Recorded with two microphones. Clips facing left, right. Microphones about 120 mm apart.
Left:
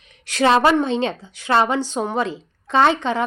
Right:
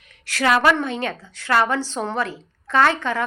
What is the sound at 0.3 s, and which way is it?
A woman's voice, 25° left (ahead or behind).